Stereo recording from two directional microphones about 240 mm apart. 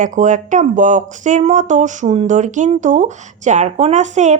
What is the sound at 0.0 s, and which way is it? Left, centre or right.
A woman's voice, right.